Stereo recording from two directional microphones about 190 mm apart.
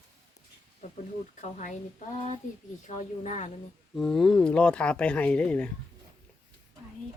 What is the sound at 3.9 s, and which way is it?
Speech, centre (ahead or behind).